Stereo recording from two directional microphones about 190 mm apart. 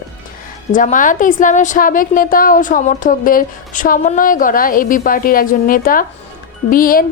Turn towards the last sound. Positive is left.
turn(degrees=50)  # may be behind; listen again after turning